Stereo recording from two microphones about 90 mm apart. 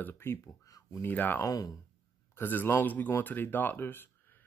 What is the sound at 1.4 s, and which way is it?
Speech, 40° left (ahead or behind).